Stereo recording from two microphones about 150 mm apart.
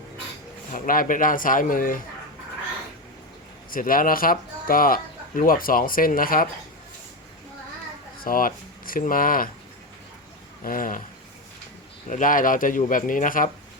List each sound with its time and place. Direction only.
0.7 s speech: 65° left (ahead or behind)
3.7 s speech: 70° left (ahead or behind)
8.2 s speech: 70° left (ahead or behind)
10.6 s speech: 65° left (ahead or behind)
12.0 s speech: 60° left (ahead or behind)